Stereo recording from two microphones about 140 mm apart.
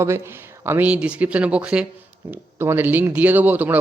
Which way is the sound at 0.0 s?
20° right (ahead or behind).